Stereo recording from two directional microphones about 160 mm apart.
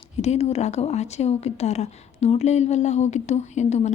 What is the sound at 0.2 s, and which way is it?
A woman's voice, 45° left (ahead or behind).